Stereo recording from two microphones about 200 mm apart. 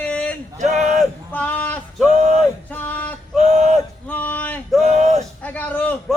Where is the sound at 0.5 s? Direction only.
35° right (ahead or behind).